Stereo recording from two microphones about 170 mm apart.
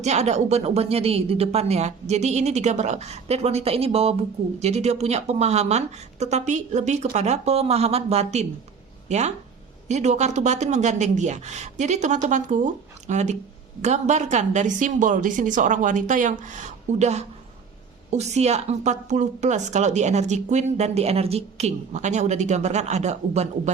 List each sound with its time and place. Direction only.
0.0 s a woman's voice: 40° right (ahead or behind)